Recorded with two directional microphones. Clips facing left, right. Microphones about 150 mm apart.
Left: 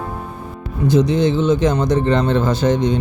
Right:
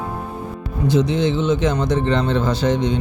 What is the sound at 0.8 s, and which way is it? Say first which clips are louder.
Speech: left 3 dB; 40° left (ahead or behind).